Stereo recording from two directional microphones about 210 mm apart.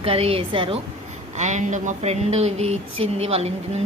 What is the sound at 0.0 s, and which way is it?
Speech, 25° right (ahead or behind).